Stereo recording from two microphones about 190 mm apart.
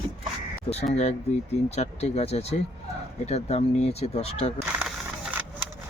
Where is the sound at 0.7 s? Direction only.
25° left (ahead or behind).